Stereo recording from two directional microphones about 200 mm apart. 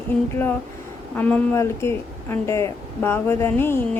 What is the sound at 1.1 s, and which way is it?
Speech, 10° left (ahead or behind).